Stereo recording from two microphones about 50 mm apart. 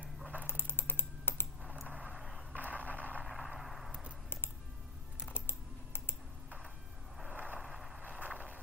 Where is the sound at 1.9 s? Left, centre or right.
Right.